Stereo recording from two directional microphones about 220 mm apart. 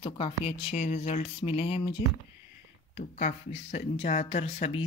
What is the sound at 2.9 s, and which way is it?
Speech, 30° left (ahead or behind).